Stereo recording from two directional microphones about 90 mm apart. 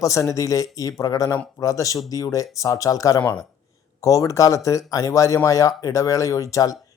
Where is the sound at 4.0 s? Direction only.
40° left (ahead or behind).